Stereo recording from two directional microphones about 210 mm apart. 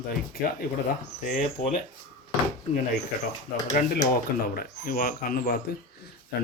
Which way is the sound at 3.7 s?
40° left (ahead or behind).